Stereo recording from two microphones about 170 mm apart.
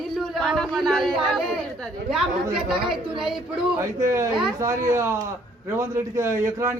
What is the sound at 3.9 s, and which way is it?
A man's voice, 15° right (ahead or behind).